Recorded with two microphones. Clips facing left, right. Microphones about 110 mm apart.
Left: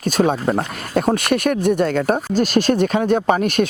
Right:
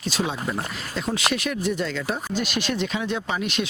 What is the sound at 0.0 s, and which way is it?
Speech, 50° left (ahead or behind).